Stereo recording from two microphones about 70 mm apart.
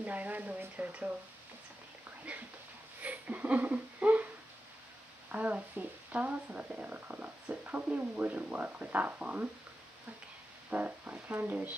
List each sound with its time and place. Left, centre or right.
0.0 s speech: right
2.3 s speech: centre
3.0 s a sound: right
5.3 s speech: right
10.7 s speech: right